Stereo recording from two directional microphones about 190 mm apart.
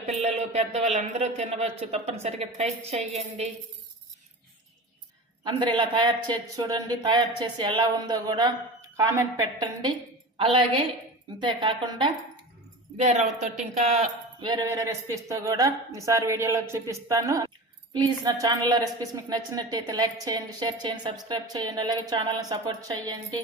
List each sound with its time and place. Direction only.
0.2 s a woman's voice: 35° right (ahead or behind)
5.4 s a woman's voice: 25° right (ahead or behind)
13.0 s a woman's voice: 35° right (ahead or behind)
14.4 s a woman's voice: 20° right (ahead or behind)